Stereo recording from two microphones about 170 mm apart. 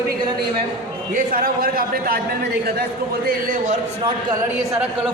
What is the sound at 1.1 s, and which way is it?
A man's voice, 55° right (ahead or behind).